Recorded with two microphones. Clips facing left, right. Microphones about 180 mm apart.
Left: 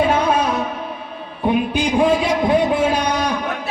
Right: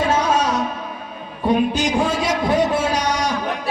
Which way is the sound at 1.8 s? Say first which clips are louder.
Left 3 dB; 90° right.